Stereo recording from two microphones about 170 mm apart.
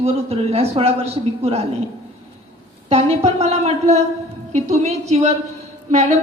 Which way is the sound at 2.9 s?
35° right (ahead or behind).